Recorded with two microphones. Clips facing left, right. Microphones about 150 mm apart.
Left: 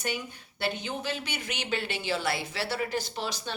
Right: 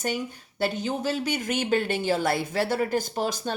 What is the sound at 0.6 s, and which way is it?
Speech, 40° right (ahead or behind).